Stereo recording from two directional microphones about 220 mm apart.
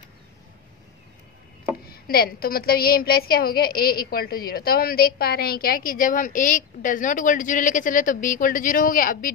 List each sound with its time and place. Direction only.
1.9 s a woman's voice: 45° left (ahead or behind)